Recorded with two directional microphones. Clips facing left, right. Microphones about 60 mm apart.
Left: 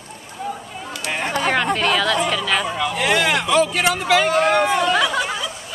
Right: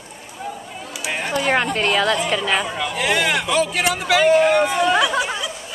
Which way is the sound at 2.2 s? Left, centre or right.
Centre.